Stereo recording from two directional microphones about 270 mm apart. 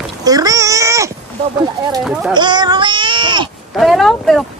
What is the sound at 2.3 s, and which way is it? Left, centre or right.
Speech, centre.